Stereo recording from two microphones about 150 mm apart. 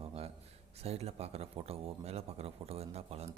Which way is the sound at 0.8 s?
45° right (ahead or behind).